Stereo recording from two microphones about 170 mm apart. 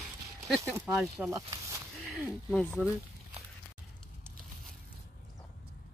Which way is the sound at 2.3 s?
Centre (ahead or behind).